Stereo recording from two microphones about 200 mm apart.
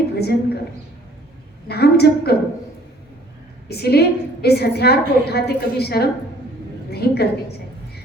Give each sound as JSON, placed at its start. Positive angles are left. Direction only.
{"t": 0.2, "sound": "a woman's voice", "side_deg": 55}
{"t": 1.6, "sound": "a woman's voice", "side_deg": 55}
{"t": 3.7, "sound": "a woman's voice", "side_deg": 55}